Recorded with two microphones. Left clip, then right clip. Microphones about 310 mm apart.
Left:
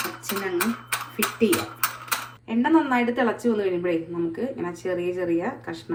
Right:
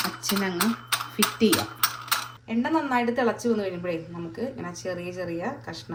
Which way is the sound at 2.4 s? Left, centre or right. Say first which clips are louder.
Left 7 dB; centre.